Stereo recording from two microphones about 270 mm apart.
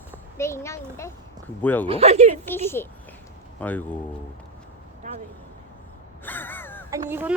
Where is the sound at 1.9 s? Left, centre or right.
Right.